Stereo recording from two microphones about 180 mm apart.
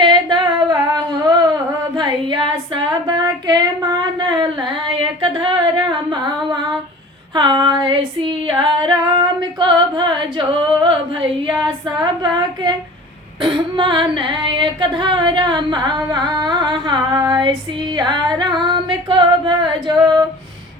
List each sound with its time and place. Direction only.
0.0 s female singing: 25° right (ahead or behind)
4.2 s a sound: 25° right (ahead or behind)
5.2 s humming: 25° right (ahead or behind)
7.3 s female singing: 25° right (ahead or behind)
11.9 s female singing: 25° right (ahead or behind)